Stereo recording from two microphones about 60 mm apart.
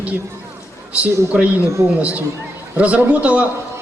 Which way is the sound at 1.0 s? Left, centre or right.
Right.